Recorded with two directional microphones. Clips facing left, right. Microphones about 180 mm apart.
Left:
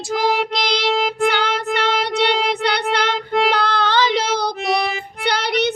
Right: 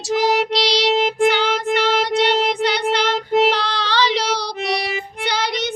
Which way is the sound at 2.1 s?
60° left (ahead or behind).